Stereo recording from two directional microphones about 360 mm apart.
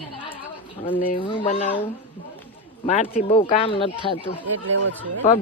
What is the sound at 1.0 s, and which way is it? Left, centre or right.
Speech, centre.